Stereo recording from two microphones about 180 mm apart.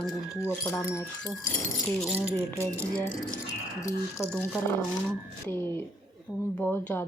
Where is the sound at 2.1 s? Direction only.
15° right (ahead or behind).